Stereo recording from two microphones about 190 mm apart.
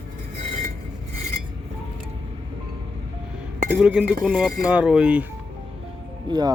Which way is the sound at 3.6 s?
5° right (ahead or behind).